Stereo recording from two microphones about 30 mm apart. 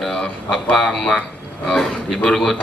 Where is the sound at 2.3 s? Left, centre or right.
Centre.